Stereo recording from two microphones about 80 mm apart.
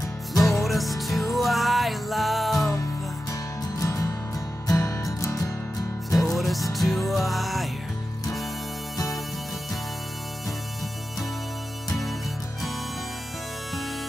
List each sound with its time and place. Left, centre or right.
0.4 s music: centre
3.8 s music: left
6.1 s music: centre